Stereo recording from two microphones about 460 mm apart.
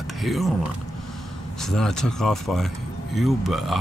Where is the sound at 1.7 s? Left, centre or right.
Centre.